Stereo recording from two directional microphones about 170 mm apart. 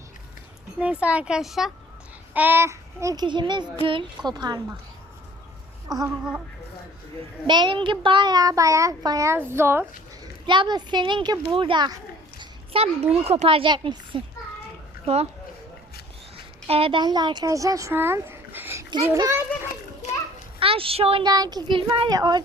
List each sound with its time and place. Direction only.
0.8 s speech: 5° right (ahead or behind); by 4.6 s 25° right (ahead or behind)
5.9 s speech: 20° right (ahead or behind)
7.4 s speech: 25° right (ahead or behind)
10.4 s speech: 25° right (ahead or behind)
12.4 s a sound: 35° right (ahead or behind)
13.1 s speech: 40° right (ahead or behind)
16.6 s speech: 35° right (ahead or behind); by 19.4 s 20° right (ahead or behind)
20.6 s speech: 30° right (ahead or behind)